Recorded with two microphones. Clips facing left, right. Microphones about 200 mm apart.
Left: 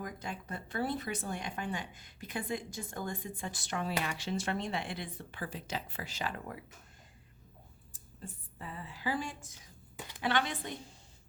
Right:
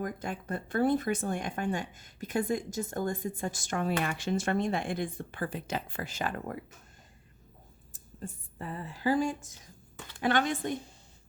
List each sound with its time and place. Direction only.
0.0 s speech: 50° right (ahead or behind)
7.9 s speech: 45° right (ahead or behind)